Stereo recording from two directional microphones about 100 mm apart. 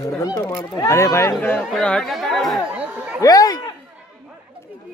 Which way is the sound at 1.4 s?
10° left (ahead or behind).